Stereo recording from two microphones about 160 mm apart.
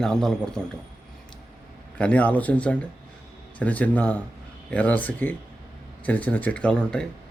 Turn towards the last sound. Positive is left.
turn(degrees=5)  # may be behind; listen again after turning